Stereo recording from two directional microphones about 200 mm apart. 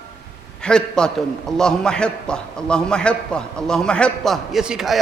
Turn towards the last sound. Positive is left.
turn(degrees=0)  # may be behind; listen again after turning